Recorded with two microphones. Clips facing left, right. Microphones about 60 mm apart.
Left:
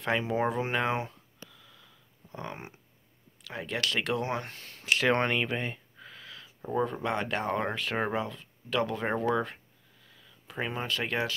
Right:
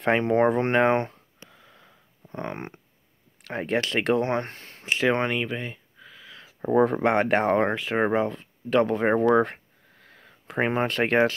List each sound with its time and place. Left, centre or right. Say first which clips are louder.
0.0 s speech: right 8 dB; right
1.5 s wheeze: right 4 dB; right
2.3 s speech: right 7 dB; right
4.9 s speech: right 3 dB; centre
6.3 s a sound: right 10 dB; right
6.8 s speech: right 9 dB; right
7.7 s speech: right 7 dB; right
9.2 s a sound: right 9 dB; right